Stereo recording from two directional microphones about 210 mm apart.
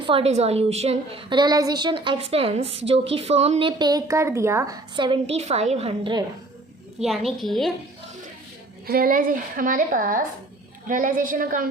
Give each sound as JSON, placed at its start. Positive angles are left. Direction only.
{"t": 0.0, "sound": "a woman's voice", "side_deg": -25}
{"t": 7.0, "sound": "a woman's voice", "side_deg": 0}
{"t": 8.9, "sound": "a woman's voice", "side_deg": -45}